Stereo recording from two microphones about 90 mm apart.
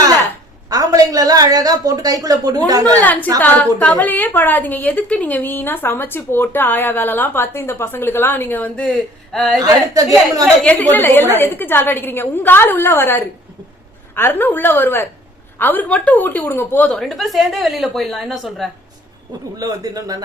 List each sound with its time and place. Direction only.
0.7 s a woman's voice: 40° right (ahead or behind)
3.0 s a woman's voice: 20° left (ahead or behind)
9.0 s speech: centre (ahead or behind)
9.6 s a woman's voice: 40° right (ahead or behind)
10.6 s a woman's voice: 15° left (ahead or behind)
16.9 s a woman's voice: centre (ahead or behind)
19.5 s speech: 45° right (ahead or behind)